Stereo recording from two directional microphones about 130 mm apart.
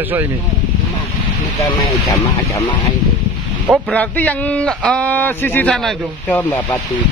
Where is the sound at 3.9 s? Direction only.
15° left (ahead or behind).